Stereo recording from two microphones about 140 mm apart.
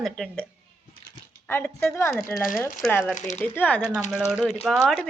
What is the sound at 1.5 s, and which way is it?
Speech, 15° left (ahead or behind).